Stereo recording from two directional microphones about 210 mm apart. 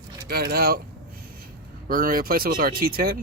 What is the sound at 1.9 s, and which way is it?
Speech, 45° right (ahead or behind).